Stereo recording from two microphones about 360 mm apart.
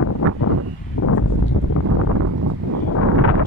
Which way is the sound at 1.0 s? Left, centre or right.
Left.